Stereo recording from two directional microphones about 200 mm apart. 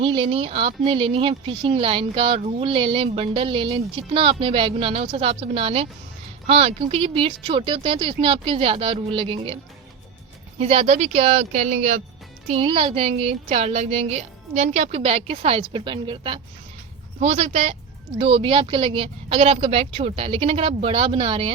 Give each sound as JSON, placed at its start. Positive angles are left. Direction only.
{"t": 0.0, "sound": "speech", "side_deg": -25}
{"t": 10.6, "sound": "speech", "side_deg": -30}